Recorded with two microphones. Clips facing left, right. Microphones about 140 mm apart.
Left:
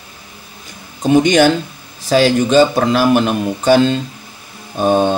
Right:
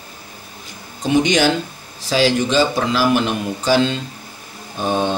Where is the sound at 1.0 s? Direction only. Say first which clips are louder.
Left 5 dB; 50° left (ahead or behind).